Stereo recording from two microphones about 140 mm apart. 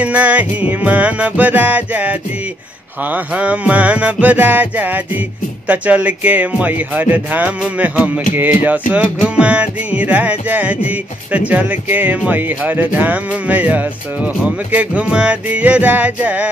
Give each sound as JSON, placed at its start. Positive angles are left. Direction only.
{"t": 0.0, "sound": "music", "side_deg": -10}